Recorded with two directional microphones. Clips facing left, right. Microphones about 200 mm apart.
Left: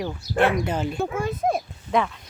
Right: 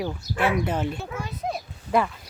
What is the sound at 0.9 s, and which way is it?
Speech, 50° left (ahead or behind).